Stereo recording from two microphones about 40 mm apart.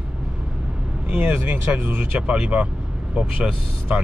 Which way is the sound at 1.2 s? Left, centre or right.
Right.